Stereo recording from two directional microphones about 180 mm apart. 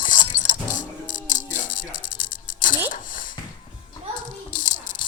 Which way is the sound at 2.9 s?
50° left (ahead or behind).